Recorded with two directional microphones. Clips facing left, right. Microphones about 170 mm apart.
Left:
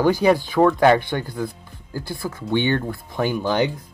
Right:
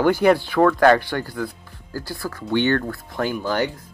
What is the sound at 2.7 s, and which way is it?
Speech, 15° left (ahead or behind).